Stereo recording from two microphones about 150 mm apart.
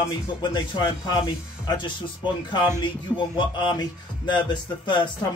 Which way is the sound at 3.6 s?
30° left (ahead or behind).